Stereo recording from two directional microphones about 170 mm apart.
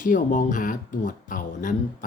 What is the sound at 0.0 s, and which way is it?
Speech, 50° left (ahead or behind).